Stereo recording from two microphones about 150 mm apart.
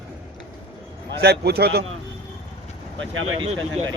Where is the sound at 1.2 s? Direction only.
90° right.